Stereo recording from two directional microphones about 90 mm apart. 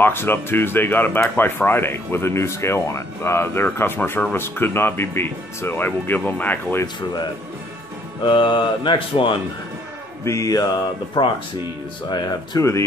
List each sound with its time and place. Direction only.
0.0 s speech: 25° left (ahead or behind)
8.2 s speech: 60° left (ahead or behind)
10.2 s mantra: 35° left (ahead or behind)
11.2 s speech: 60° left (ahead or behind)
12.1 s speech: 50° left (ahead or behind)